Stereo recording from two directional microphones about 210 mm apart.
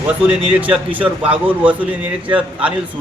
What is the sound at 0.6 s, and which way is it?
A man's voice, 5° right (ahead or behind).